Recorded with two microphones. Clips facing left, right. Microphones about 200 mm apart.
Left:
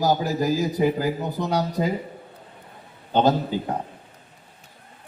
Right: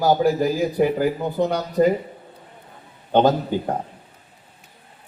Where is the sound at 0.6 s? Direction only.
60° right (ahead or behind).